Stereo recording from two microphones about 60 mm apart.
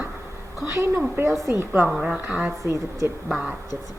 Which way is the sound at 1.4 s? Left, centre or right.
Right.